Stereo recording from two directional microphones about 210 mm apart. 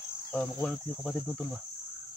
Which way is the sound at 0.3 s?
5° left (ahead or behind).